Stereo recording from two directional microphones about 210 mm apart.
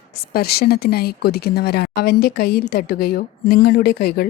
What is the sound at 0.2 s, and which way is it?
Speech, 45° left (ahead or behind).